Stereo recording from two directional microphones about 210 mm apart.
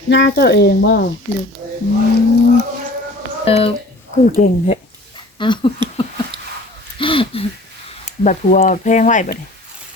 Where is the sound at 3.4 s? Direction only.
25° left (ahead or behind).